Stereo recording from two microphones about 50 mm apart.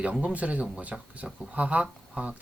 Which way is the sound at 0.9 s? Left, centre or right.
Centre.